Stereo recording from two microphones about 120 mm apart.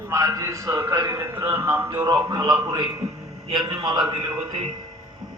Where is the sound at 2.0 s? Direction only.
30° right (ahead or behind).